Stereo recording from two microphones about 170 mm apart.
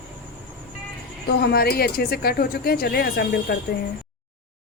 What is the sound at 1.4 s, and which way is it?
Speech, 65° left (ahead or behind).